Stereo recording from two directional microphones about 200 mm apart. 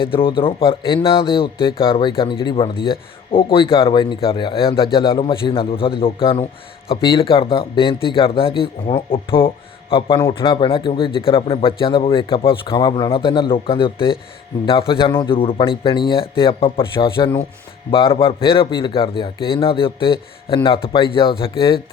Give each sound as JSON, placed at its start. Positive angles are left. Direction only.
{"t": 0.0, "sound": "speech", "side_deg": 25}